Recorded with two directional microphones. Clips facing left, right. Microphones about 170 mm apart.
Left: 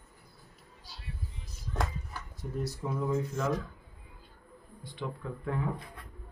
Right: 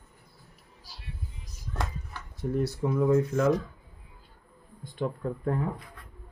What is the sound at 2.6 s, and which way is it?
Speech, 60° right (ahead or behind).